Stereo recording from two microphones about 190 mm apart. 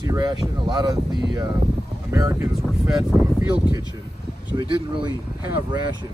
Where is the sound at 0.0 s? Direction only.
20° right (ahead or behind).